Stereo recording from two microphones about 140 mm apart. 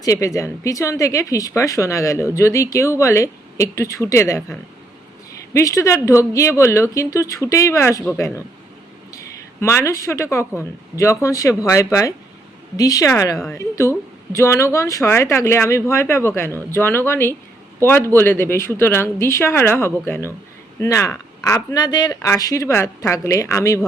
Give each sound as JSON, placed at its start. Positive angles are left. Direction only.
{"t": 0.0, "sound": "speech", "side_deg": 25}
{"t": 5.5, "sound": "speech", "side_deg": 25}
{"t": 9.1, "sound": "speech", "side_deg": 20}